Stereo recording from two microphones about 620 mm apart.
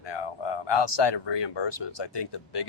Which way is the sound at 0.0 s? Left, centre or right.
Left.